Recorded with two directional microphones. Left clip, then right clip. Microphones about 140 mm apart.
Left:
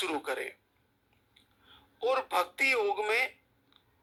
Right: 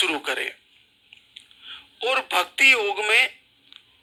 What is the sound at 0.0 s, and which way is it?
Speech, 15° right (ahead or behind).